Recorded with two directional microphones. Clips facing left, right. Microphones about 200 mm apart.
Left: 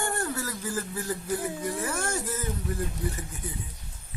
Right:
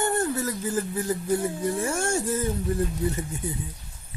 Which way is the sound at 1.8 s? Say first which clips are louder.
Right 5 dB; 30° right (ahead or behind).